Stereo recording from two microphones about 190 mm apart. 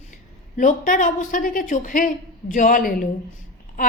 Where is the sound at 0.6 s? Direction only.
45° left (ahead or behind).